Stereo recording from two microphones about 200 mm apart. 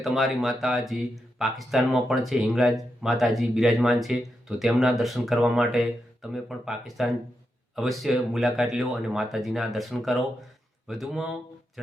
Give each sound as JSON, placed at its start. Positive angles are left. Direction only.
{"t": 0.0, "sound": "speech", "side_deg": 0}